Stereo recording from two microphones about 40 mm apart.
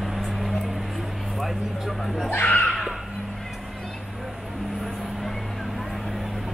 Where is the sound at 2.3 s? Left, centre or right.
Left.